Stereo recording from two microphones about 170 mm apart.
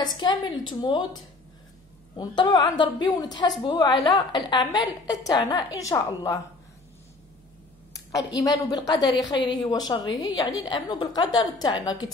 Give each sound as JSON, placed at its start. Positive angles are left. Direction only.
{"t": 0.0, "sound": "a woman's voice", "side_deg": 25}
{"t": 7.9, "sound": "a woman's voice", "side_deg": 20}